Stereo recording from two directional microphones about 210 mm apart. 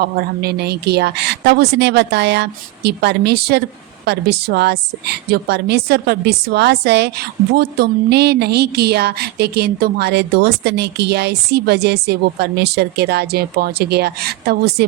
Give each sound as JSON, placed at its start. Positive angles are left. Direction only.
{"t": 0.0, "sound": "a woman's voice", "side_deg": -50}